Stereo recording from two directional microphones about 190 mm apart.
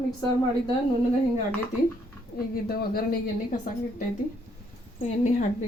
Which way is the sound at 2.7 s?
50° left (ahead or behind).